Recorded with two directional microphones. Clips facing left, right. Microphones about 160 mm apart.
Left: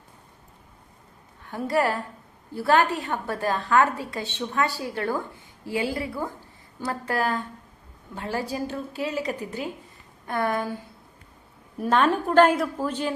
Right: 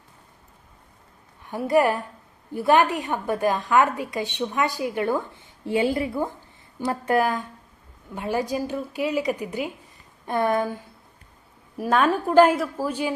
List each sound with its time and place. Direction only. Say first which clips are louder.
1.5 s a woman's voice: right 4 dB; 15° right (ahead or behind)
11.8 s a woman's voice: right 1 dB; 10° right (ahead or behind)